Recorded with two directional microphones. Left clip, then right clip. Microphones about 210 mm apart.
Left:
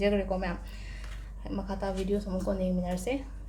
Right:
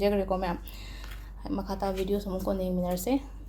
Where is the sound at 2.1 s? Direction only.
30° right (ahead or behind).